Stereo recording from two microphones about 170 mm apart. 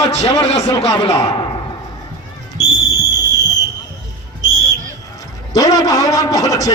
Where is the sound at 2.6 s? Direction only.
20° left (ahead or behind).